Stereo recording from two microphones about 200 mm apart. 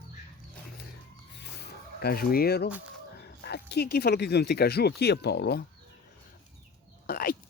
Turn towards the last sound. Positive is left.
turn(degrees=50)  # may be behind; listen again after turning